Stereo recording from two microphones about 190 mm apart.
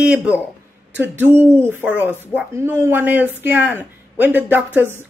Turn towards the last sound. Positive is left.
turn(degrees=-10)  # may be behind; listen again after turning